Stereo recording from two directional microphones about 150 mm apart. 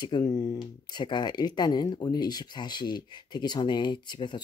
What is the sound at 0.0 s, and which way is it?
Speech, 30° left (ahead or behind).